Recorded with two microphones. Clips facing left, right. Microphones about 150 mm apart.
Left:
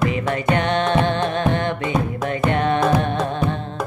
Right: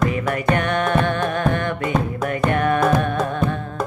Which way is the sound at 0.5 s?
25° left (ahead or behind).